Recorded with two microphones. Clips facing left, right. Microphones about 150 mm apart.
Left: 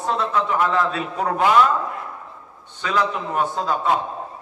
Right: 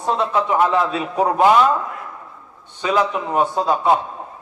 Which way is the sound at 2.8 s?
20° right (ahead or behind).